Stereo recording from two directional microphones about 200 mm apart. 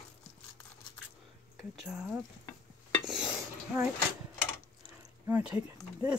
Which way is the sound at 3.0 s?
5° right (ahead or behind).